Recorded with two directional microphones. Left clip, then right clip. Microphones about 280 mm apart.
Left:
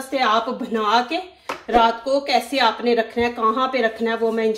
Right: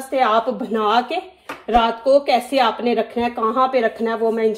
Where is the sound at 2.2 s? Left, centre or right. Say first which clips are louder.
Right 2 dB; centre.